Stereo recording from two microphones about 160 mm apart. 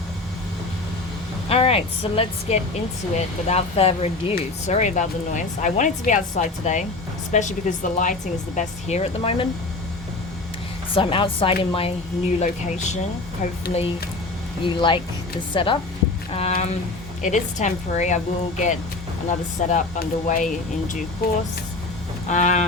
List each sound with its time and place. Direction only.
1.5 s speech: 40° left (ahead or behind)
10.9 s speech: 35° left (ahead or behind)
17.2 s speech: 50° left (ahead or behind)
19.3 s speech: 50° left (ahead or behind)
21.2 s speech: 70° left (ahead or behind)
22.3 s speech: 50° left (ahead or behind)